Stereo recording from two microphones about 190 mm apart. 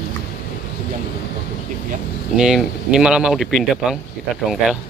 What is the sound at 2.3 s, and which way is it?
Speech, 5° right (ahead or behind).